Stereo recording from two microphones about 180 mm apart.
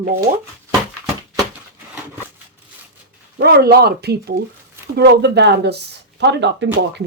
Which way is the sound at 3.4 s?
65° right (ahead or behind).